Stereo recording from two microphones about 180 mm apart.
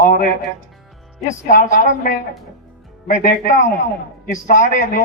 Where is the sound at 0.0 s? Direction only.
50° left (ahead or behind).